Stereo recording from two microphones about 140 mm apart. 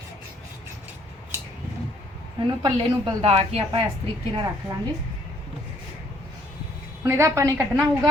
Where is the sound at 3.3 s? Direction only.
45° right (ahead or behind).